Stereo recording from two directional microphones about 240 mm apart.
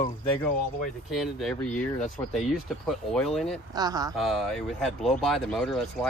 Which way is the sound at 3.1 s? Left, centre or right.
Centre.